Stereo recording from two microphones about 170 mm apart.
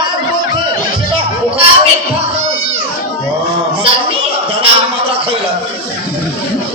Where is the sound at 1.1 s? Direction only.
30° right (ahead or behind).